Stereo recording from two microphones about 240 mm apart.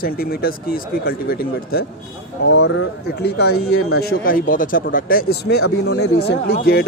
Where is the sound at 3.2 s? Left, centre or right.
Left.